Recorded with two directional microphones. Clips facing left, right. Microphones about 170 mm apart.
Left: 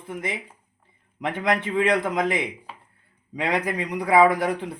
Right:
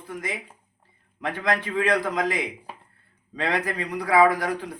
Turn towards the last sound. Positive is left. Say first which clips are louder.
# left 2 dB
turn(degrees=25)  # may be behind; listen again after turning